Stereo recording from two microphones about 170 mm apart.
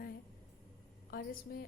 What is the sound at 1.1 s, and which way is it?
Speech, 60° left (ahead or behind).